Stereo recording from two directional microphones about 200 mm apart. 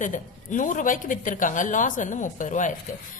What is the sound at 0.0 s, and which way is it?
A woman's voice, 40° left (ahead or behind).